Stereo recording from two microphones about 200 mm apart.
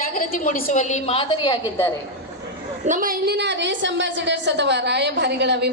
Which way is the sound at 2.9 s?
45° right (ahead or behind).